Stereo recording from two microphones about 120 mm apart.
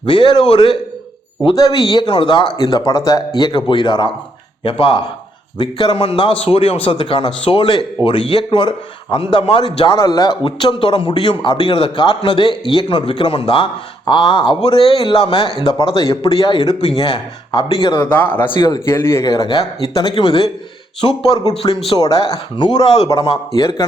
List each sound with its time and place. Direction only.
0.0 s a man's voice: 45° left (ahead or behind)
1.5 s a man's voice: 30° left (ahead or behind)
6.0 s a man's voice: 50° left (ahead or behind)
17.9 s speech: 15° left (ahead or behind)
18.5 s a man's voice: 35° left (ahead or behind)
18.9 s speech: 20° left (ahead or behind)
19.9 s a man's voice: 50° left (ahead or behind)
21.2 s a man's voice: 35° left (ahead or behind)
21.5 s speech: 55° left (ahead or behind)
21.9 s a man's voice: 30° left (ahead or behind)